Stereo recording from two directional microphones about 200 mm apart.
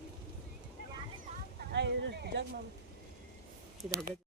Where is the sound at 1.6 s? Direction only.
55° right (ahead or behind).